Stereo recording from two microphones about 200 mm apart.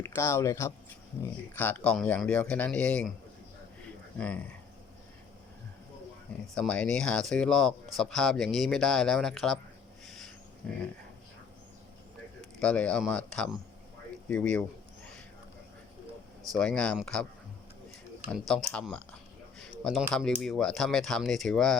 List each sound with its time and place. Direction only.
0.0 s speech: 10° left (ahead or behind)
6.5 s speech: 5° left (ahead or behind)
10.1 s a sound: centre (ahead or behind)
10.6 s speech: 5° left (ahead or behind)
12.5 s speech: 5° left (ahead or behind)
16.5 s speech: 5° left (ahead or behind)
18.3 s speech: 5° left (ahead or behind)
19.5 s a sound: centre (ahead or behind)
20.4 s speech: 5° left (ahead or behind)